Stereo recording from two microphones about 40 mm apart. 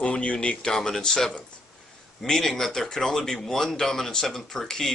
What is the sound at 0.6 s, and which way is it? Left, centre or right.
Speech, centre.